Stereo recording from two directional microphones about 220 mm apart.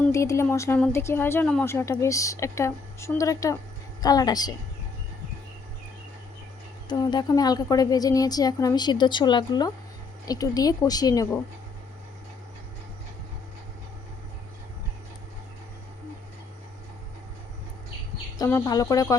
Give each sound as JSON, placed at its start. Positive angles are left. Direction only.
{"t": 0.0, "sound": "a woman's voice", "side_deg": 15}
{"t": 6.8, "sound": "a woman's voice", "side_deg": 20}
{"t": 18.3, "sound": "a woman's voice", "side_deg": 15}